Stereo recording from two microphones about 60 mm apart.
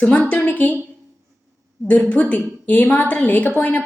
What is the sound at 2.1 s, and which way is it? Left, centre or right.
A woman's voice, left.